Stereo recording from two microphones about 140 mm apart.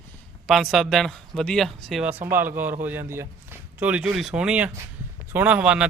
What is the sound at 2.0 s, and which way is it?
A man's voice, 15° right (ahead or behind).